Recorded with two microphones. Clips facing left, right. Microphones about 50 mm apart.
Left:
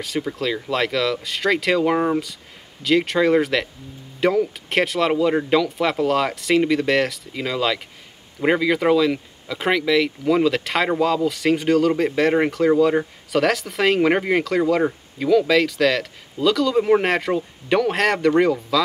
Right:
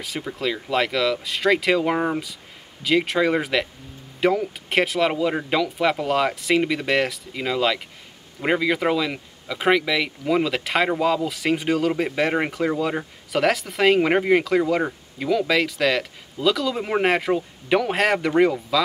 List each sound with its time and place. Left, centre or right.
0.0 s speech: centre